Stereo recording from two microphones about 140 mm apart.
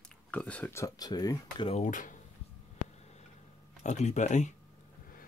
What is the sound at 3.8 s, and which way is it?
Speech, 55° left (ahead or behind).